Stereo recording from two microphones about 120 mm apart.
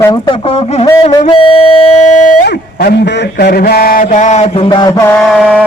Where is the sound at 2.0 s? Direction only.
85° left.